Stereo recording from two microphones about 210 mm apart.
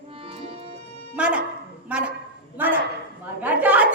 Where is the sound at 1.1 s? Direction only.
5° right (ahead or behind).